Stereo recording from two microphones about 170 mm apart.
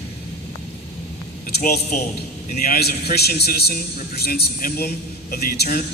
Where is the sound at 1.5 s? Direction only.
55° left (ahead or behind).